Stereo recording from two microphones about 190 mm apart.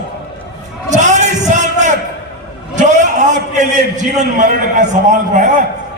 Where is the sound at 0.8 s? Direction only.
40° right (ahead or behind).